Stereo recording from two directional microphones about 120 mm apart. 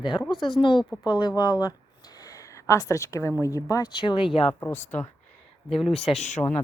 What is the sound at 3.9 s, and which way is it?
Speech, 40° left (ahead or behind).